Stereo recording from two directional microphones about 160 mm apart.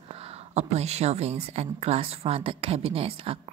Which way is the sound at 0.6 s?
40° right (ahead or behind).